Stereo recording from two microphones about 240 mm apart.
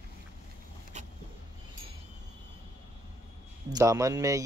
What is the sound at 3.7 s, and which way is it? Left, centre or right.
Speech, centre.